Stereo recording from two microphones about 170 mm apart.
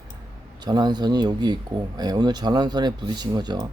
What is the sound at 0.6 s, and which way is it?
Speech, 25° right (ahead or behind).